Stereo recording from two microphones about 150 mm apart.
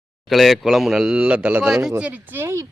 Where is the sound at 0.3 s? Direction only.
Centre (ahead or behind).